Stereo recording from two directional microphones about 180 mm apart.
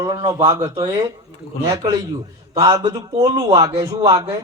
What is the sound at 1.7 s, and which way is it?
A man's voice, 20° right (ahead or behind).